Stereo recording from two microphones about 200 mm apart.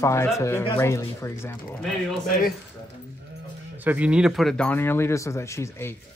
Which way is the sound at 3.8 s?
5° right (ahead or behind).